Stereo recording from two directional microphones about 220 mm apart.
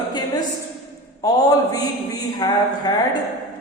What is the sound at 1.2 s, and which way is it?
A man's voice, 15° left (ahead or behind).